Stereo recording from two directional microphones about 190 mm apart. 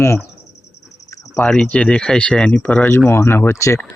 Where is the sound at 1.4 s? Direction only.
5° left (ahead or behind).